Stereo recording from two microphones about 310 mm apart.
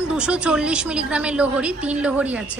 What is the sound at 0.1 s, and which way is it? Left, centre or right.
A woman's voice, centre.